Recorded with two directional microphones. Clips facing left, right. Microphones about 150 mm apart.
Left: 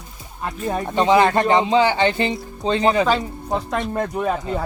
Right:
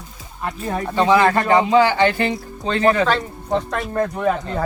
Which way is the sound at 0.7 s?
20° left (ahead or behind).